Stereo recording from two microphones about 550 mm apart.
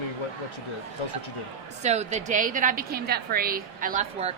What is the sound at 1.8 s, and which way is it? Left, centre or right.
A woman's voice, centre.